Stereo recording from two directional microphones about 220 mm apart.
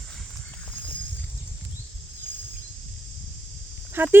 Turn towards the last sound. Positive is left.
turn(degrees=-10)  # may be behind; listen again after turning